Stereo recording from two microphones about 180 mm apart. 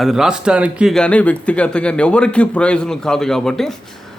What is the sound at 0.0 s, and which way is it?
Speech, centre (ahead or behind).